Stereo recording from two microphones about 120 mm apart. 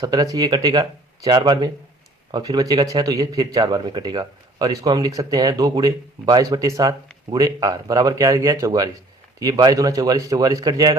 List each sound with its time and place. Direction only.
0.0 s speech: 30° right (ahead or behind)
2.3 s a man's voice: 30° right (ahead or behind)